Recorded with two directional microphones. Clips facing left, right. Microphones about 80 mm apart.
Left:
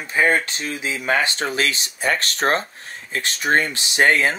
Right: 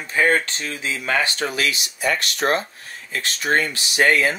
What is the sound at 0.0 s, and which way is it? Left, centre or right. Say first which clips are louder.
Speech: even; centre.